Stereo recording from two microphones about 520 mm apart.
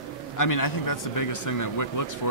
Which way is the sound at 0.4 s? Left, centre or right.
Left.